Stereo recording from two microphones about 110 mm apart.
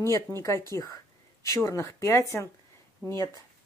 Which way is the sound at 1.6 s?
25° left (ahead or behind).